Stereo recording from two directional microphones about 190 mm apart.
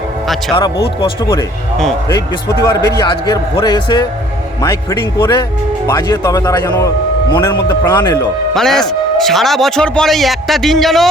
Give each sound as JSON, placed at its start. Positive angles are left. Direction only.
{"t": 1.0, "sound": "a man's voice", "side_deg": 20}
{"t": 2.6, "sound": "a man's voice", "side_deg": 20}
{"t": 8.5, "sound": "speech", "side_deg": 0}